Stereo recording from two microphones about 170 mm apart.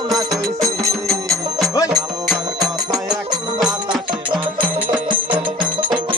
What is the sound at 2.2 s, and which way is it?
Music, centre (ahead or behind).